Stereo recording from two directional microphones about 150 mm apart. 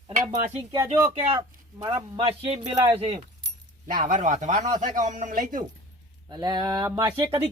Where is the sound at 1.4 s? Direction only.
30° right (ahead or behind).